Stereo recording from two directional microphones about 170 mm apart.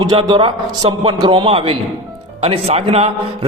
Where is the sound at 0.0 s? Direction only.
30° right (ahead or behind).